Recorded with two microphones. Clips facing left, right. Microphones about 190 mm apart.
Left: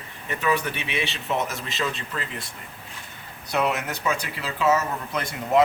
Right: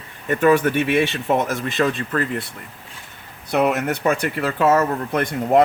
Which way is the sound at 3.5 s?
55° right (ahead or behind).